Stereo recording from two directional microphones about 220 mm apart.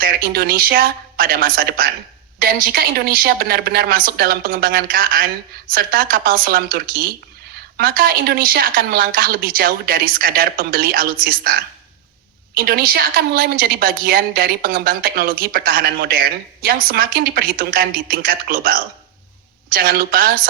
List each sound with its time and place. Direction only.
0.0 s a woman's voice: 40° right (ahead or behind)